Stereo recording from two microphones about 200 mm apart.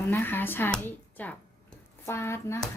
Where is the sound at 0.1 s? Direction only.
10° left (ahead or behind).